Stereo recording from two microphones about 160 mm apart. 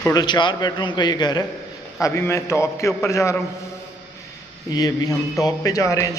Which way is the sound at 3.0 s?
20° left (ahead or behind).